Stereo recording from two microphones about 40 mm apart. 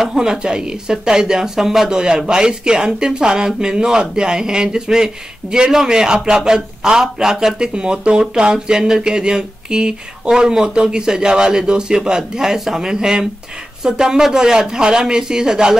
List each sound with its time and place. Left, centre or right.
0.0 s speech: centre